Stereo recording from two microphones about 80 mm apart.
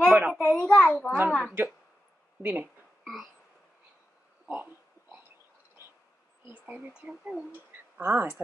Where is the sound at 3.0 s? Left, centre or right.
Centre.